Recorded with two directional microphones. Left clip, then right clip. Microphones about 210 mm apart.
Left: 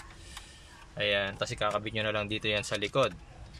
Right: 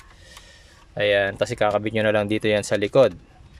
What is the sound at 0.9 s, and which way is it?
Speech, 35° right (ahead or behind).